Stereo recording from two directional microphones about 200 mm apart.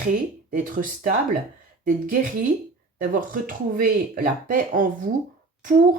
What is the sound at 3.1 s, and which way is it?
Speech, 45° right (ahead or behind).